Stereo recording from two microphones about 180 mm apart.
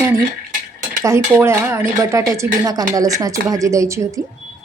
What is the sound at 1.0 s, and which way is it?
Cutlery, 15° right (ahead or behind).